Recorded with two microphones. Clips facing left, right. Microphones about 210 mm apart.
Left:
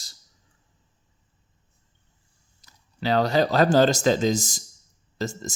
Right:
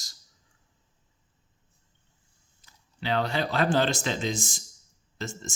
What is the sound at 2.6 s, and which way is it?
Speech, 40° left (ahead or behind).